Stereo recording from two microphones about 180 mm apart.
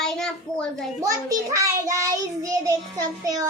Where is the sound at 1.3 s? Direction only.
20° right (ahead or behind).